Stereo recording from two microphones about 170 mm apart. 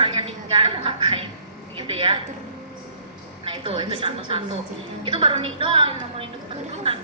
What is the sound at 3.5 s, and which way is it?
A woman's voice, 30° right (ahead or behind).